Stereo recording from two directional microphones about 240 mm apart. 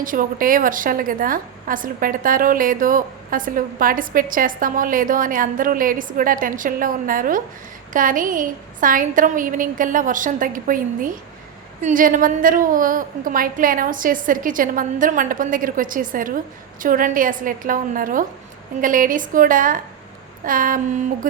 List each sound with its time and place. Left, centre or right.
0.0 s a woman's voice: right